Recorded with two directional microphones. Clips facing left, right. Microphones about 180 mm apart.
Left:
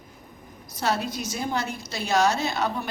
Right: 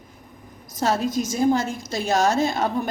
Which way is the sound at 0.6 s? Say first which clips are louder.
Right 4 dB; 45° right (ahead or behind).